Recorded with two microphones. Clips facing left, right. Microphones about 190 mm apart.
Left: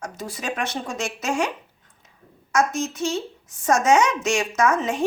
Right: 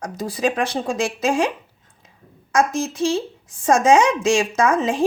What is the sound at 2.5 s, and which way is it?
Speech, 30° right (ahead or behind).